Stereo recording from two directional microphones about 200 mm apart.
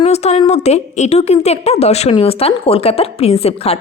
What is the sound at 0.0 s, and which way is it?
A woman's voice, 30° left (ahead or behind).